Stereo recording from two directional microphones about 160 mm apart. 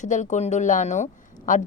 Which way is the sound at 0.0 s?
50° left (ahead or behind).